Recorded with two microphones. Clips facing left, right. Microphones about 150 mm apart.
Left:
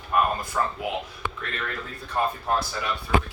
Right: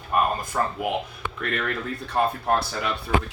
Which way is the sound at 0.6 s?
40° right (ahead or behind).